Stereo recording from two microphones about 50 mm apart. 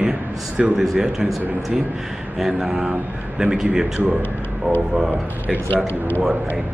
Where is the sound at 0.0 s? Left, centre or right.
Centre.